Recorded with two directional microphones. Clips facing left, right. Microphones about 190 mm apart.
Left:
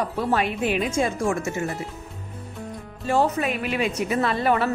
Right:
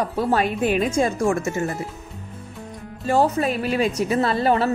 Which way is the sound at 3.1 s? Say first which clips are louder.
Right 2 dB; 35° right (ahead or behind).